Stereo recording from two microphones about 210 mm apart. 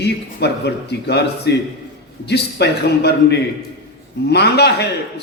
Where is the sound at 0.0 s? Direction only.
50° left (ahead or behind).